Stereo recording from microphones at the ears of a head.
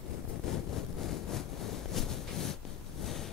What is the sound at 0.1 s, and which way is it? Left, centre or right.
Vehicle, left.